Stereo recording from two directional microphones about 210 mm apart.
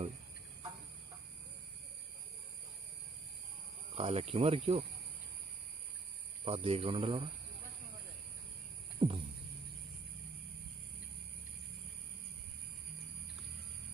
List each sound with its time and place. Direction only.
3.9 s speech: 30° right (ahead or behind)
6.4 s speech: 25° right (ahead or behind)
9.0 s a sound: 25° right (ahead or behind)